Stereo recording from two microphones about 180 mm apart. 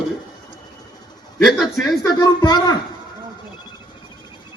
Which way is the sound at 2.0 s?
20° left (ahead or behind).